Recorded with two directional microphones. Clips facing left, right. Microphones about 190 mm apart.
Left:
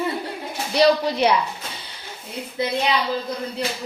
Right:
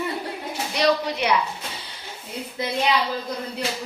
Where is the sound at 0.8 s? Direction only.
35° left (ahead or behind).